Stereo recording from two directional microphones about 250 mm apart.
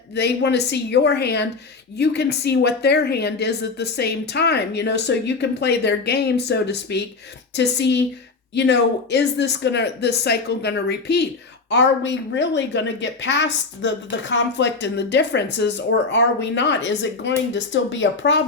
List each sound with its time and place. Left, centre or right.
0.2 s a woman's voice: left